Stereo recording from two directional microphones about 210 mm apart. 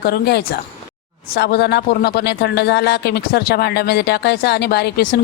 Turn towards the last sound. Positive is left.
turn(degrees=50)  # may be behind; listen again after turning